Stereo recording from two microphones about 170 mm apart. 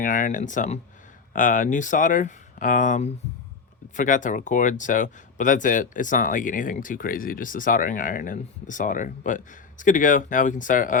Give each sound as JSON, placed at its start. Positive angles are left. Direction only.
{"t": 0.0, "sound": "speech", "side_deg": 50}